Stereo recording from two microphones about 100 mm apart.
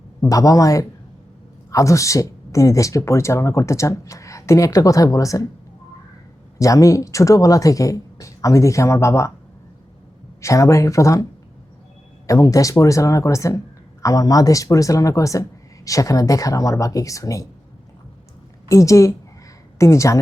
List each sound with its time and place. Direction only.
0.2 s speech: 35° left (ahead or behind)
6.6 s speech: 35° left (ahead or behind)
10.4 s speech: 30° left (ahead or behind)
12.3 s speech: 35° left (ahead or behind)
18.7 s speech: 30° left (ahead or behind)